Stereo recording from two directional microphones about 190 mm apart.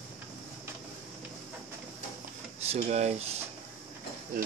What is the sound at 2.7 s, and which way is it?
Speech, 35° right (ahead or behind).